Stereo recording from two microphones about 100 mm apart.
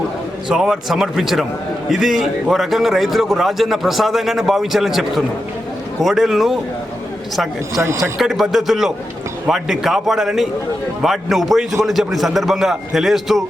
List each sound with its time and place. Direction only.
0.4 s a man's voice: 5° right (ahead or behind)
7.8 s speech: 25° right (ahead or behind)
8.2 s a man's voice: 5° right (ahead or behind)